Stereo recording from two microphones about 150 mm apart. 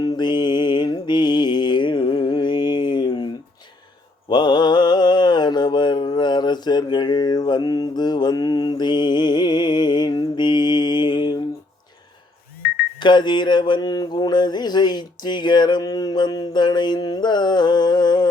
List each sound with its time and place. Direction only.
0.0 s mantra: 30° left (ahead or behind)
4.3 s mantra: 30° left (ahead or behind)
13.0 s mantra: 30° left (ahead or behind)